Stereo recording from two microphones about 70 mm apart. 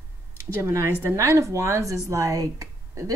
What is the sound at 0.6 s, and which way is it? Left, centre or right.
Speech, right.